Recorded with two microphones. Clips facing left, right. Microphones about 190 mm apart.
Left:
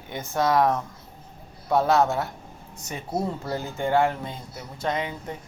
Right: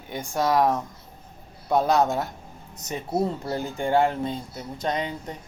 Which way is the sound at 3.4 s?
15° right (ahead or behind).